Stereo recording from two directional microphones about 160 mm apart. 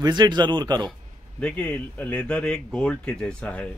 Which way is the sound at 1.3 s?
5° left (ahead or behind).